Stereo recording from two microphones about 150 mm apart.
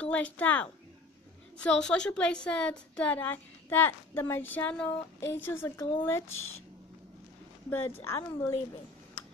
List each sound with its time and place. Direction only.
0.0 s a woman's voice: 10° left (ahead or behind)
7.7 s a woman's voice: 15° left (ahead or behind)